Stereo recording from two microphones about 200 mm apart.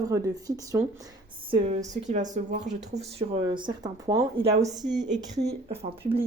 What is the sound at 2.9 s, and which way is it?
Speech, 25° right (ahead or behind).